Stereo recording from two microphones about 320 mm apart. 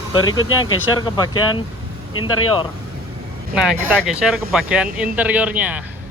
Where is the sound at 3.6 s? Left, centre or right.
Centre.